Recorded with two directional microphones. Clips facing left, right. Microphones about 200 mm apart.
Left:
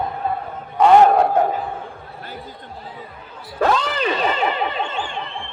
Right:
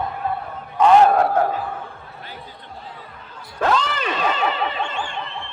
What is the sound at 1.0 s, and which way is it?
Speech, 15° left (ahead or behind).